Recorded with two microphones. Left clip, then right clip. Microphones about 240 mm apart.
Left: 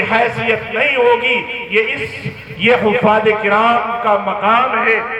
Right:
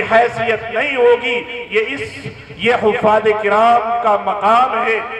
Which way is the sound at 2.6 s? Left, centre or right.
Right.